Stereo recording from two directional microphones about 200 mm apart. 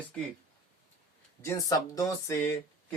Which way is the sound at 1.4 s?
15° left (ahead or behind).